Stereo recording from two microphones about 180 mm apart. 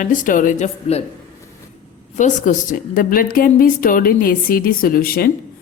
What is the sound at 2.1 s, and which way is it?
A woman's voice, 45° left (ahead or behind).